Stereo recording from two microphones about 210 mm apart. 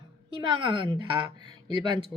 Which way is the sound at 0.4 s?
25° right (ahead or behind).